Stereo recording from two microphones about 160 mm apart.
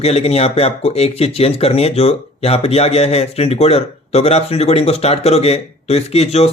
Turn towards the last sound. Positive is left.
turn(degrees=40)  # may be behind; listen again after turning